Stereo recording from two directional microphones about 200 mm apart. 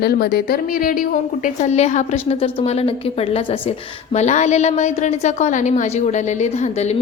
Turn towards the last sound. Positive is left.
turn(degrees=35)  # may be behind; listen again after turning